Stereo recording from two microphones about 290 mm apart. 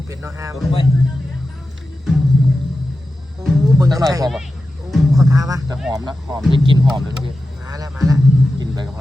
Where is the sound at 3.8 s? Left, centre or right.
Centre.